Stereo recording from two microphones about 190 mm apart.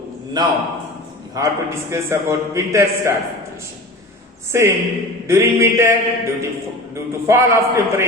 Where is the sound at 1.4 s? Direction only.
20° right (ahead or behind).